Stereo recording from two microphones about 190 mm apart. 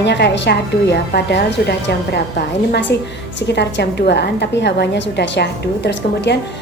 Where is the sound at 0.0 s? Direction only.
65° left (ahead or behind).